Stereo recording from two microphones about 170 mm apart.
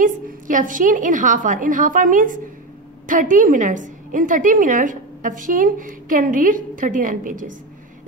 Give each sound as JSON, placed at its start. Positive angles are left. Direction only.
{"t": 0.0, "sound": "a woman's voice", "side_deg": -50}